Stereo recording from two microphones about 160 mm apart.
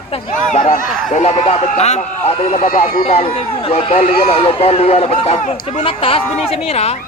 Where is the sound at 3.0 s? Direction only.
40° left (ahead or behind).